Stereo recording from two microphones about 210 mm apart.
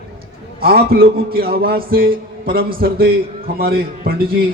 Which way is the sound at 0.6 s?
45° right (ahead or behind).